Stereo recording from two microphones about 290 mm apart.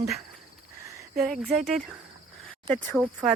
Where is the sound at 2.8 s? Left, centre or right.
Centre.